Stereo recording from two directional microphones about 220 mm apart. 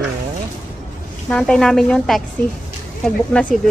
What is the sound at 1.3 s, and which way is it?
A woman's voice, 5° left (ahead or behind).